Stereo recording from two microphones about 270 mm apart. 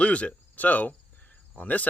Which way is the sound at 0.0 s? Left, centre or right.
Centre.